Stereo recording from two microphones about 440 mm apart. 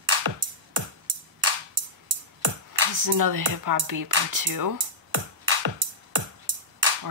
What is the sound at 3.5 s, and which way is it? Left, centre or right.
Speech, right.